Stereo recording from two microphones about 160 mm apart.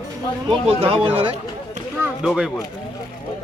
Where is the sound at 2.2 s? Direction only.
5° right (ahead or behind).